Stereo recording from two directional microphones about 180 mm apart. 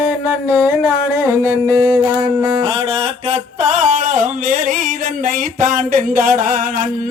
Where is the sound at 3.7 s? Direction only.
45° right (ahead or behind).